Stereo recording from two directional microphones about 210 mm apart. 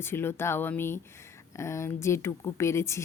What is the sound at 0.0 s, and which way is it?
Speech, 10° left (ahead or behind).